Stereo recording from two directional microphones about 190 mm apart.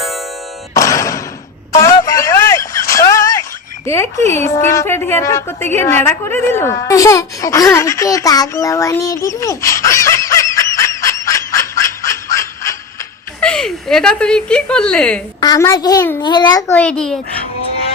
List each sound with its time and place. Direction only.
0.7 s music: 15° left (ahead or behind)
1.7 s a sound: 15° left (ahead or behind)
3.8 s a woman's voice: 15° left (ahead or behind)
13.5 s a woman's voice: centre (ahead or behind)
15.4 s a child's voice: 20° left (ahead or behind)
16.7 s a child's voice: 5° left (ahead or behind)